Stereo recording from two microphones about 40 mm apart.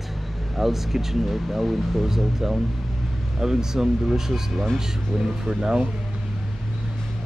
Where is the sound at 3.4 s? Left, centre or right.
Centre.